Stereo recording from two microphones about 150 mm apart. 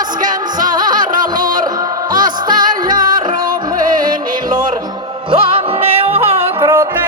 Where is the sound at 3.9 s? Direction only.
65° right (ahead or behind).